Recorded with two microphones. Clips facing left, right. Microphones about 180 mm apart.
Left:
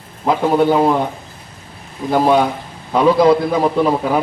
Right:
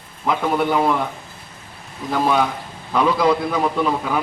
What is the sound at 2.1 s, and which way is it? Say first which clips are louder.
A man's voice: left 5 dB; 30° left (ahead or behind).